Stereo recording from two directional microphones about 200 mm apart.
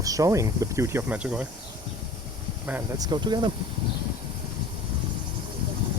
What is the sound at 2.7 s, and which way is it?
Speech, 15° right (ahead or behind).